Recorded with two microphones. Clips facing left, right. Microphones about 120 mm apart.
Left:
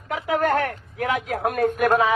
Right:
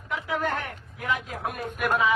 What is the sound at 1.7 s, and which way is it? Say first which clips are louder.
Speech: left 3 dB; 45° left (ahead or behind).